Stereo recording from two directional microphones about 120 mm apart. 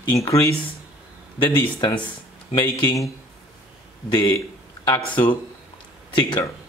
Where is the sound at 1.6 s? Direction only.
45° left (ahead or behind).